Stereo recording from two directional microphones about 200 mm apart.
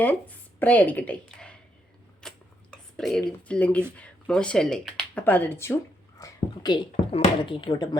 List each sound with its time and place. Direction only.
0.0 s speech: 10° left (ahead or behind)
2.2 s a sound: centre (ahead or behind)
3.9 s speech: 5° left (ahead or behind); by 7.9 s 25° left (ahead or behind)